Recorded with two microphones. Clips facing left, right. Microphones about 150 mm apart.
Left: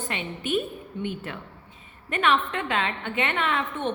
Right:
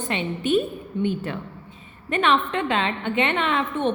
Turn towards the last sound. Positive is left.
turn(degrees=-20)  # may be behind; listen again after turning